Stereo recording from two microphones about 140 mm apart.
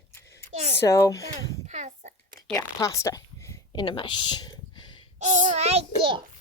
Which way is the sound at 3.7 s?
35° left (ahead or behind).